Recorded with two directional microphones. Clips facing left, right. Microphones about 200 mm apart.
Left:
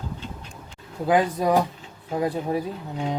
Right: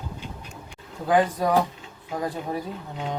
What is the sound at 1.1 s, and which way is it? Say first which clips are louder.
A man's voice: left 1 dB; 10° left (ahead or behind).